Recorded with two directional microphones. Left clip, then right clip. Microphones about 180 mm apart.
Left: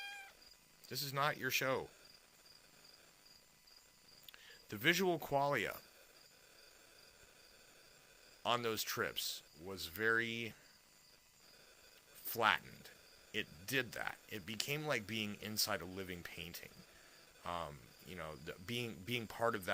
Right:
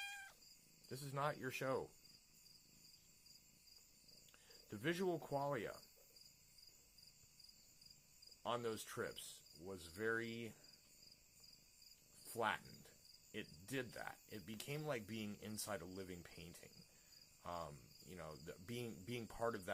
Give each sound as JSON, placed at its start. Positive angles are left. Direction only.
{"t": 0.0, "sound": "cat", "side_deg": -20}
{"t": 0.9, "sound": "speech", "side_deg": 5}
{"t": 4.3, "sound": "cricket", "side_deg": 15}
{"t": 8.4, "sound": "speech", "side_deg": 20}
{"t": 12.3, "sound": "speech", "side_deg": 20}